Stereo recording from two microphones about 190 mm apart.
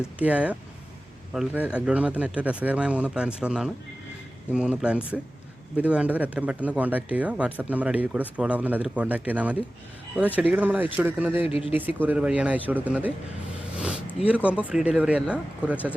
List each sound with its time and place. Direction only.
0.2 s speech: 5° right (ahead or behind)
11.4 s speech: 30° left (ahead or behind)
11.7 s speech: 10° right (ahead or behind)
13.7 s a sound: 5° right (ahead or behind)
14.2 s speech: 5° right (ahead or behind)